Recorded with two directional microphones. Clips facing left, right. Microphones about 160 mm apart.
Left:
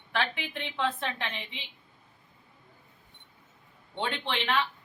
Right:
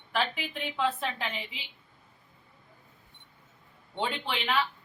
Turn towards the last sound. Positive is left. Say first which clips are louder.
# left 1 dB
turn(degrees=-5)  # may be behind; listen again after turning